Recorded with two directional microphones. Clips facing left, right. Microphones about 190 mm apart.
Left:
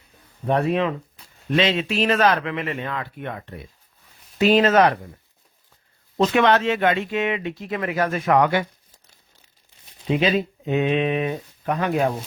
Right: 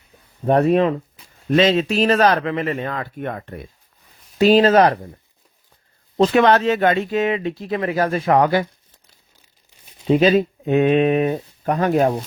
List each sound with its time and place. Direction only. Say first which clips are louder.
0.4 s speech: right 5 dB; 40° right (ahead or behind)
4.4 s speech: right 3 dB; 35° right (ahead or behind)
6.1 s speech: right 3 dB; 35° right (ahead or behind)
10.1 s speech: right 6 dB; 40° right (ahead or behind)